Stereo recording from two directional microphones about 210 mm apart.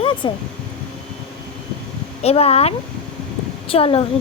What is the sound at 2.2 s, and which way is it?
Speech, 30° left (ahead or behind).